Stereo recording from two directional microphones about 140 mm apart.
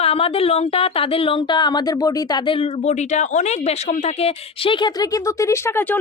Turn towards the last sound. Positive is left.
turn(degrees=15)  # may be behind; listen again after turning